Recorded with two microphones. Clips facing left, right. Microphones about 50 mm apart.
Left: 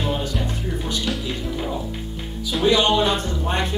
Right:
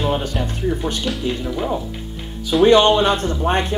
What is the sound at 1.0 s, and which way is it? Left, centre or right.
Speech, centre.